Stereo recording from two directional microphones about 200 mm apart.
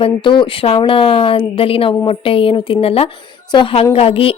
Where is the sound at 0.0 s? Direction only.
25° left (ahead or behind).